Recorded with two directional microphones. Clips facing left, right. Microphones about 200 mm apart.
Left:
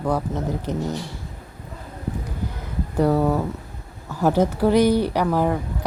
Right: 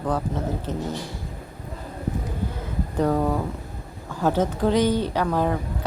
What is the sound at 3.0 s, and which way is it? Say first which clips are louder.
A woman's voice: left 3 dB; 10° left (ahead or behind).